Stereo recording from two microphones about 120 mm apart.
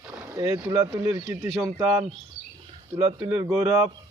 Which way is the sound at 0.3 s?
25° right (ahead or behind).